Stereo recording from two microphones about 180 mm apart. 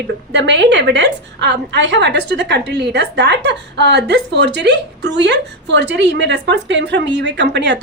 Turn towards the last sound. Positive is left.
turn(degrees=-80)